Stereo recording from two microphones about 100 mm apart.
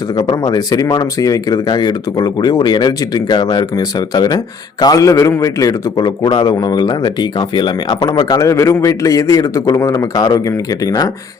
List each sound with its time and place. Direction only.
0.2 s speech: 40° left (ahead or behind)